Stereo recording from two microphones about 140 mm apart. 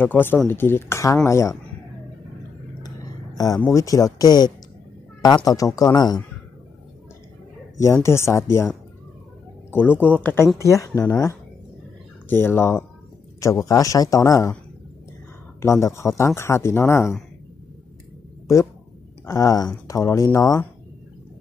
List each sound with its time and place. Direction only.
0.0 s speech: 15° left (ahead or behind)
3.3 s speech: 25° left (ahead or behind)
7.7 s speech: 20° left (ahead or behind)
9.7 s speech: 15° left (ahead or behind)
12.3 s speech: 15° left (ahead or behind)
15.6 s speech: 20° left (ahead or behind)
19.2 s speech: 25° left (ahead or behind)